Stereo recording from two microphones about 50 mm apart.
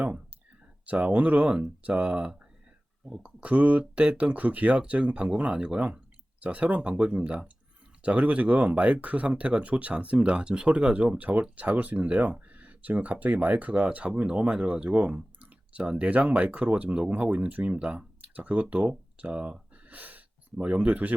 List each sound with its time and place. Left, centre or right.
0.9 s speech: right
1.5 s speech: centre
19.7 s a sound: right